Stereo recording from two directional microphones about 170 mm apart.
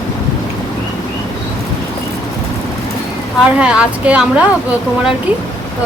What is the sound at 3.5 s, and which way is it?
Speech, 5° right (ahead or behind).